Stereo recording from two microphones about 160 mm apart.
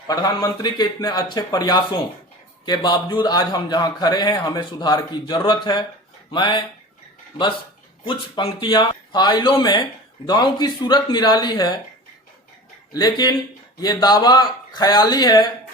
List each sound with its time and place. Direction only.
0.1 s a man's voice: 25° left (ahead or behind)
8.6 s a man's voice: 30° left (ahead or behind)
12.9 s a man's voice: 25° left (ahead or behind)